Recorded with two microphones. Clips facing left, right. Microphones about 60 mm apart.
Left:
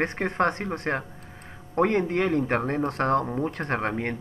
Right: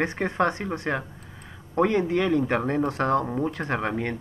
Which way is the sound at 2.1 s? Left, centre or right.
Left.